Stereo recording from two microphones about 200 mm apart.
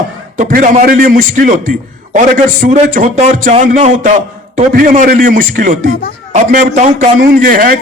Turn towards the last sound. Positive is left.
turn(degrees=-45)  # may be behind; listen again after turning